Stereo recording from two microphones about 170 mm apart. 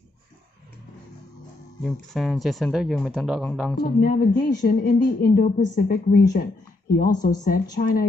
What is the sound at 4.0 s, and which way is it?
Speech, 60° left (ahead or behind).